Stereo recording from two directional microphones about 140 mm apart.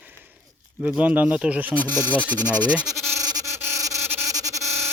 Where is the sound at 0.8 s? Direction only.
10° right (ahead or behind).